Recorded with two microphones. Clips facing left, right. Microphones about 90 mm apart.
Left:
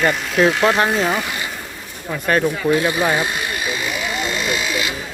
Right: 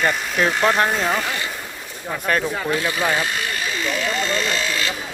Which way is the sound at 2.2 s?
Centre (ahead or behind).